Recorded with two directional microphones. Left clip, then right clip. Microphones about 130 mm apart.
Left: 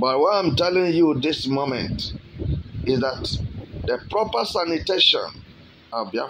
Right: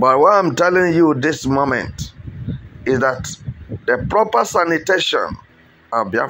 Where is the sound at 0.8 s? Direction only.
30° right (ahead or behind).